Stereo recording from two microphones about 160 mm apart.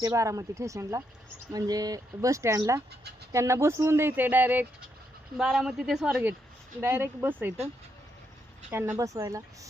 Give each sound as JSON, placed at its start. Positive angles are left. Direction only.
{"t": 0.0, "sound": "speech", "side_deg": -20}
{"t": 8.7, "sound": "speech", "side_deg": -15}